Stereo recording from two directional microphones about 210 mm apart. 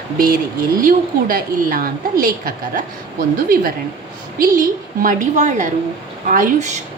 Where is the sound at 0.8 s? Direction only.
40° right (ahead or behind).